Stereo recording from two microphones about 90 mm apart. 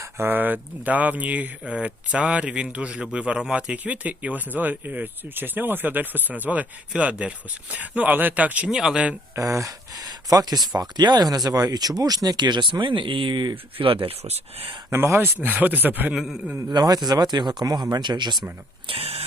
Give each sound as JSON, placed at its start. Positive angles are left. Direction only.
{"t": 0.0, "sound": "speech", "side_deg": -25}
{"t": 9.3, "sound": "speech", "side_deg": -35}
{"t": 14.8, "sound": "speech", "side_deg": -30}
{"t": 16.1, "sound": "a man's voice", "side_deg": -5}
{"t": 16.6, "sound": "speech", "side_deg": -50}
{"t": 18.9, "sound": "a sound", "side_deg": -90}